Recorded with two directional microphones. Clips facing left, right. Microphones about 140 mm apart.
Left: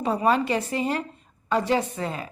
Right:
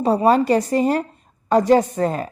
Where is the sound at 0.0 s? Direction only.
40° right (ahead or behind).